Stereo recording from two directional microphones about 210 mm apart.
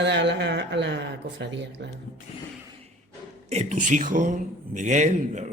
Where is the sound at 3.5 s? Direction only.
35° right (ahead or behind).